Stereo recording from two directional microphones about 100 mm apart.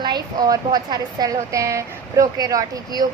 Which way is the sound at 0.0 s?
45° right (ahead or behind).